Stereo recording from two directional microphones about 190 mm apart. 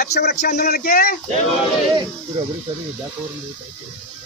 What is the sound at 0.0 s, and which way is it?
Speech, 55° left (ahead or behind).